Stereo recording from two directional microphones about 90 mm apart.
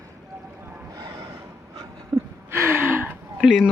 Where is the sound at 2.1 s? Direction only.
50° right (ahead or behind).